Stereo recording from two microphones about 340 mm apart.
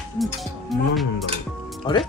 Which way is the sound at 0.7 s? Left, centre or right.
Centre.